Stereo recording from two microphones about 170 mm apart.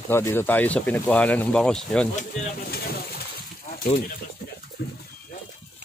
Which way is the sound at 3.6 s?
60° left (ahead or behind).